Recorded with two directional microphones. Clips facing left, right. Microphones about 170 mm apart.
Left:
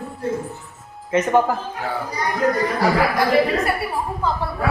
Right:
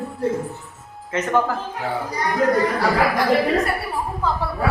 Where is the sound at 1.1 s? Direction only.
15° left (ahead or behind).